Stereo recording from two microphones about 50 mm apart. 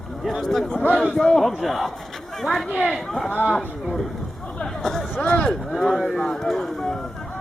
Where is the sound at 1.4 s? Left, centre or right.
Centre.